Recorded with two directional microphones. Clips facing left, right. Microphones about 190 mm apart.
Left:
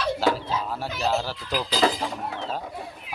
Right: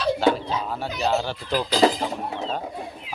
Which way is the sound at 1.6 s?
25° right (ahead or behind).